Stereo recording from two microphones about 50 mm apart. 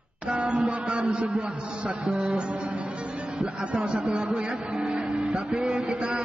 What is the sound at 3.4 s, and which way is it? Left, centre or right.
A man's voice, right.